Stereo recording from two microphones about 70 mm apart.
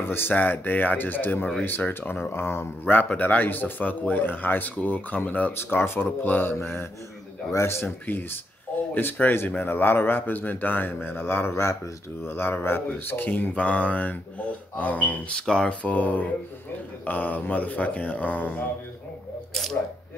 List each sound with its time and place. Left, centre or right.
0.0 s a man's voice: left
3.1 s a man's voice: left
19.5 s speech: centre